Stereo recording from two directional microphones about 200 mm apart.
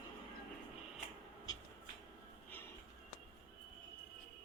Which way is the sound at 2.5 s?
10° left (ahead or behind).